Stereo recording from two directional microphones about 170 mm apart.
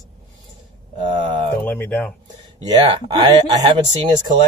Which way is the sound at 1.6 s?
10° left (ahead or behind).